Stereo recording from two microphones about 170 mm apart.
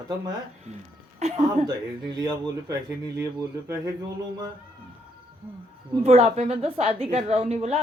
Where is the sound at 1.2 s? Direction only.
40° right (ahead or behind).